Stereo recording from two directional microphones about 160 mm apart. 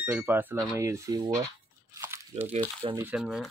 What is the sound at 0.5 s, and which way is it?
Speech, 20° right (ahead or behind).